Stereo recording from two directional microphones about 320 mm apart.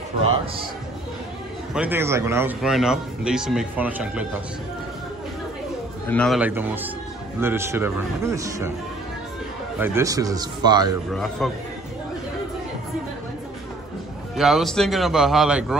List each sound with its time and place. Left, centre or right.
0.2 s a man's voice: centre
1.7 s speech: centre
6.0 s a man's voice: centre
9.8 s a man's voice: centre
11.1 s speech: centre
14.3 s speech: centre